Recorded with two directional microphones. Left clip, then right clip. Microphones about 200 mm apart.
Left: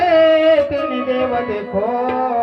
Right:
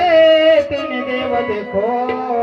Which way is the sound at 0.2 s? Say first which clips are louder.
Right 3 dB; 25° left (ahead or behind).